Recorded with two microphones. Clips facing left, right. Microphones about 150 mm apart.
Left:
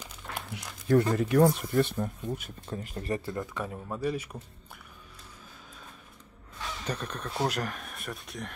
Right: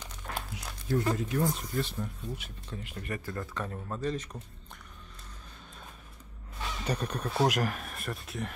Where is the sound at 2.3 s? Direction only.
45° left (ahead or behind); by 3.3 s 30° left (ahead or behind).